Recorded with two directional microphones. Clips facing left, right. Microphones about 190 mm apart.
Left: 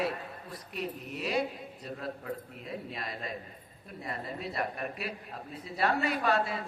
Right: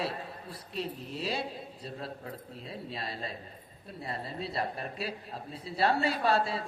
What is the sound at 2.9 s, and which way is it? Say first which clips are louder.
A man's voice: even; 30° right (ahead or behind).